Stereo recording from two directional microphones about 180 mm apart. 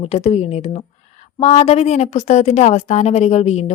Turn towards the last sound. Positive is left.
turn(degrees=35)  # may be behind; listen again after turning